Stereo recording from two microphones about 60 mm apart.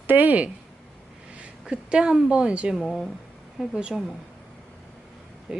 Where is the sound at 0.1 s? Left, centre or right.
Right.